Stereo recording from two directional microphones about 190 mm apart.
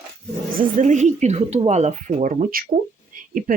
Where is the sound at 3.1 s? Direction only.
45° right (ahead or behind).